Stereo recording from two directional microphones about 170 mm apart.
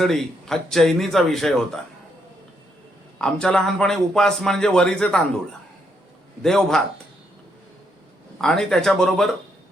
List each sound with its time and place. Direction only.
0.0 s a man's voice: centre (ahead or behind)
3.2 s a man's voice: 5° left (ahead or behind)
6.4 s a man's voice: 5° left (ahead or behind)
8.4 s a man's voice: 5° left (ahead or behind)